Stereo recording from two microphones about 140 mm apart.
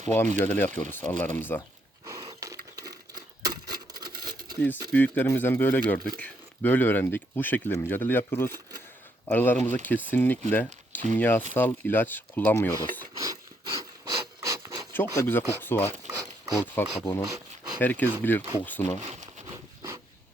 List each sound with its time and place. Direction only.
0.3 s speech: 15° left (ahead or behind)
2.0 s a sound: 25° right (ahead or behind)
4.9 s speech: 10° left (ahead or behind)
10.5 s a sound: 10° left (ahead or behind)
11.2 s speech: 15° left (ahead or behind)
13.1 s filing: 25° right (ahead or behind)
13.7 s wood: 25° right (ahead or behind)
14.9 s speech: 15° left (ahead or behind)
15.9 s a sound: 20° right (ahead or behind)
16.7 s speech: 15° left (ahead or behind)
17.2 s rub: 25° right (ahead or behind)
17.7 s speech: 15° left (ahead or behind)
18.9 s speech: 55° right (ahead or behind)
19.5 s a sound: 25° right (ahead or behind)